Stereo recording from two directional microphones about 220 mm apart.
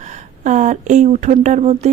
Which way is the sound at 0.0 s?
35° right (ahead or behind).